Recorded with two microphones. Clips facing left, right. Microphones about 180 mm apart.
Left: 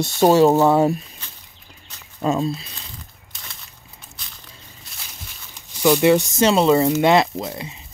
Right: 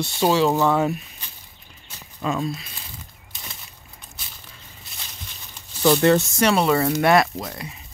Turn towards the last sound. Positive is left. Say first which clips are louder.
# left 4 dB
turn(degrees=25)  # may be behind; listen again after turning